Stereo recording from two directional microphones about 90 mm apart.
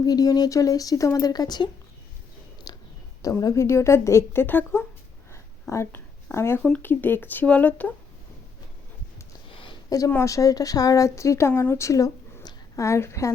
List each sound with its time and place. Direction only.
0.0 s speech: 45° left (ahead or behind)
2.7 s a sound: 50° left (ahead or behind)
3.2 s a woman's voice: 40° left (ahead or behind); by 4.9 s 20° left (ahead or behind)
5.3 s a sound: 30° left (ahead or behind)
6.6 s speech: 10° left (ahead or behind)
6.8 s speech: 20° left (ahead or behind)
9.9 s a woman's voice: 45° left (ahead or behind)